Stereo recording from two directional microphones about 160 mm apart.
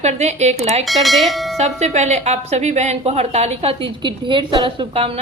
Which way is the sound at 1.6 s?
45° right (ahead or behind).